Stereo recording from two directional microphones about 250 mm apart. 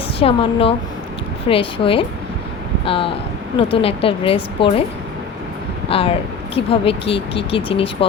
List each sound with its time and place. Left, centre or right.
0.2 s speech: left
5.9 s speech: left